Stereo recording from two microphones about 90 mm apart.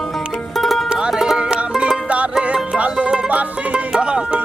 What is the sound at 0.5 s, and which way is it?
Music, centre (ahead or behind).